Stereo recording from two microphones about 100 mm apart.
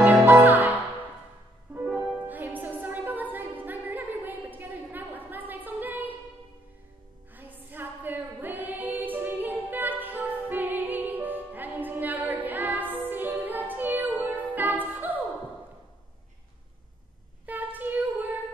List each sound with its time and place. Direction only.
0.0 s music: 20° right (ahead or behind)
7.3 s singing: 20° right (ahead or behind)
14.4 s music: 15° right (ahead or behind)
17.5 s child singing: 15° right (ahead or behind)